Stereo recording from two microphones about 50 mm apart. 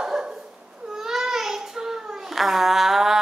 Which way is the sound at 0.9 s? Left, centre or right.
Centre.